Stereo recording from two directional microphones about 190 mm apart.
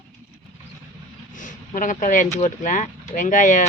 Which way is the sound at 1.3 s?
40° left (ahead or behind).